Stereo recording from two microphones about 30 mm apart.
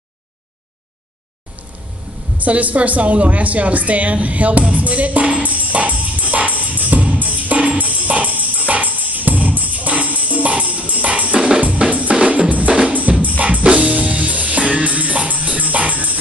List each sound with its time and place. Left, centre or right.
2.3 s a woman's voice: right
5.4 s music: right
7.5 s music: right
7.8 s music: right
12.1 s drum: right
12.4 s music: right
13.1 s music: right
13.4 s music: right
15.2 s dog: right